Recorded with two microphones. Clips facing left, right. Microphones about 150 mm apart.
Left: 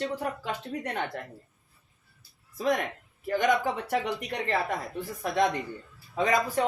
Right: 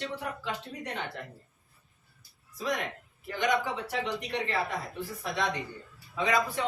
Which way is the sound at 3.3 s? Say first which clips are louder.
Left 4 dB; 45° left (ahead or behind).